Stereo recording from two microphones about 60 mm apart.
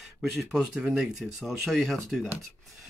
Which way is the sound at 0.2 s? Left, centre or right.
Centre.